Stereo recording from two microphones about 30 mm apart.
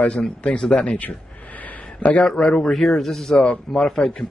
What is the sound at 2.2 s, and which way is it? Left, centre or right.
Speech, centre.